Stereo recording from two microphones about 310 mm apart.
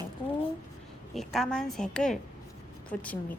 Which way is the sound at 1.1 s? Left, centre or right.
Centre.